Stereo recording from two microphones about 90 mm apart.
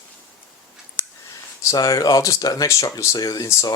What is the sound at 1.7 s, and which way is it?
Speech, 40° left (ahead or behind).